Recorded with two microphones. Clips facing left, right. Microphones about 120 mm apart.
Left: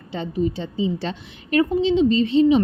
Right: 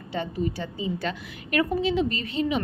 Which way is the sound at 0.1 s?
20° left (ahead or behind).